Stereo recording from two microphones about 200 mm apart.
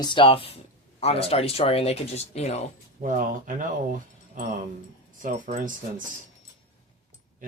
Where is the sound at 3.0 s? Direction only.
35° right (ahead or behind).